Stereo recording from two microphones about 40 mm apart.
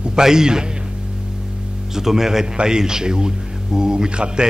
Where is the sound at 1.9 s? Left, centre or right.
Centre.